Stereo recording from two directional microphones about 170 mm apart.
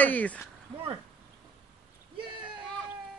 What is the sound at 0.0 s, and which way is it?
Speech, 10° left (ahead or behind).